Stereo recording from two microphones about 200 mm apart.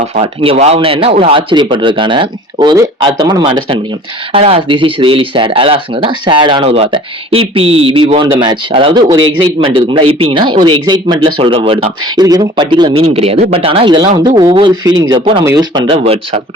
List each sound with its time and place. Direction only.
0.2 s speech: 30° right (ahead or behind)